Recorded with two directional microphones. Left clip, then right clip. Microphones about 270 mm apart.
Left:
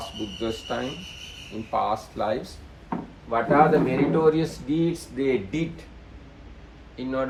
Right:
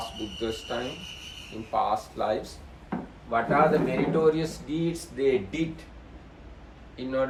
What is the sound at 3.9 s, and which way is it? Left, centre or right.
Speech, left.